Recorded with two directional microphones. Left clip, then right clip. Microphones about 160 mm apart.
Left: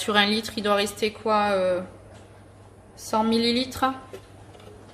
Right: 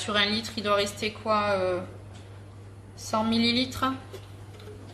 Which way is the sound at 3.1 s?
55° left (ahead or behind).